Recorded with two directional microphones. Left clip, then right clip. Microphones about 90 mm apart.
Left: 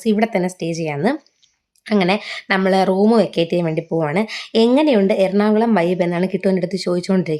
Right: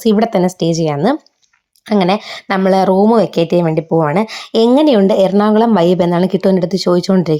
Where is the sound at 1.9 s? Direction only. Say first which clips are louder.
Right 4 dB; 35° right (ahead or behind).